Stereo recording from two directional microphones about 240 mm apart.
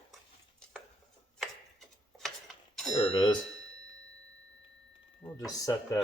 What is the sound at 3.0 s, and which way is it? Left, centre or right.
Doorbell, left.